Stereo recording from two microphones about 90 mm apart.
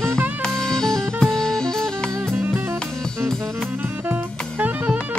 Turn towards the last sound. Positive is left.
turn(degrees=-20)  # may be behind; listen again after turning